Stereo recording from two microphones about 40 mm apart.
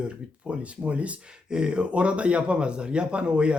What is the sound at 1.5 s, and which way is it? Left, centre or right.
Speech, right.